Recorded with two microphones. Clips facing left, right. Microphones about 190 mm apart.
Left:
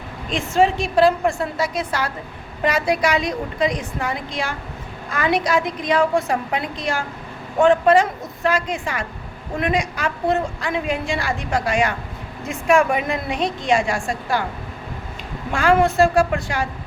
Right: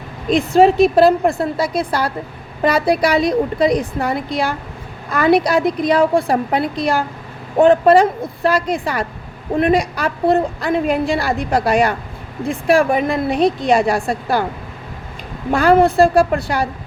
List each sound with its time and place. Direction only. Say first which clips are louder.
0.3 s a woman's voice: right 7 dB; 35° right (ahead or behind)
15.5 s a woman's voice: right 4 dB; 35° right (ahead or behind)